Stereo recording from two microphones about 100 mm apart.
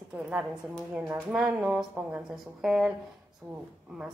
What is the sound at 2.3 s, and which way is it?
Speech, 5° right (ahead or behind).